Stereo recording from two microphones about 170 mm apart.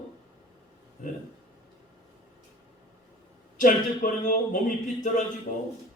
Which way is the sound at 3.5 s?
55° left (ahead or behind).